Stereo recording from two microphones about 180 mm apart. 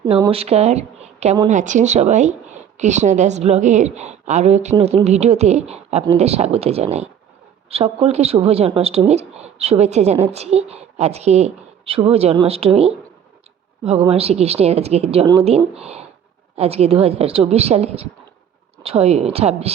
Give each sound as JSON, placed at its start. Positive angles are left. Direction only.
{"t": 0.0, "sound": "a woman's voice", "side_deg": -25}